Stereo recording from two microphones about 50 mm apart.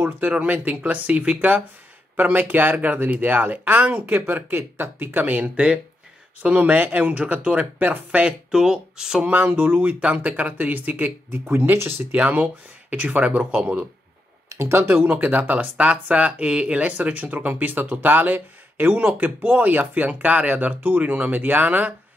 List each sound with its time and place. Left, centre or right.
0.3 s speech: right
2.1 s speech: right
8.2 s speech: centre
9.2 s speech: right
9.5 s speech: right
12.2 s speech: right
14.6 s speech: right